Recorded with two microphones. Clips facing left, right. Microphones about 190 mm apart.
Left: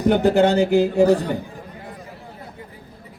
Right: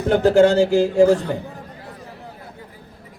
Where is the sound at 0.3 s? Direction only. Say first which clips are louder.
Right 2 dB; 60° left (ahead or behind).